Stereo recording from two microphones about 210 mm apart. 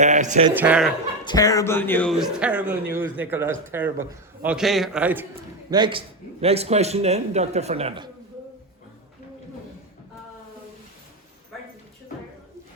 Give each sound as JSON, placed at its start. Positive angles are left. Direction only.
{"t": 0.0, "sound": "speech", "side_deg": -35}
{"t": 0.5, "sound": "speech", "side_deg": -5}
{"t": 1.2, "sound": "a man's voice", "side_deg": 20}
{"t": 5.7, "sound": "a man's voice", "side_deg": -25}